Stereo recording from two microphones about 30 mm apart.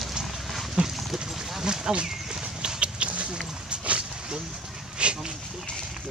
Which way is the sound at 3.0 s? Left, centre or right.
Right.